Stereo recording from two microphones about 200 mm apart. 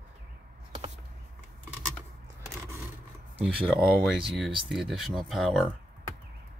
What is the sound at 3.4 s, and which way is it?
Speech, centre (ahead or behind).